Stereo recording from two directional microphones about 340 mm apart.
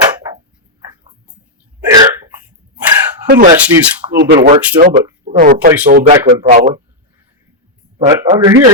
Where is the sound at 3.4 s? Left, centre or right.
Centre.